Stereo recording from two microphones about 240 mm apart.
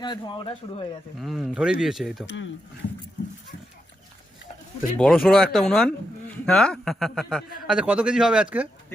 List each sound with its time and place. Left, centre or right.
0.0 s a man's voice: centre
1.2 s a man's voice: centre
2.2 s speech: left
4.9 s a man's voice: centre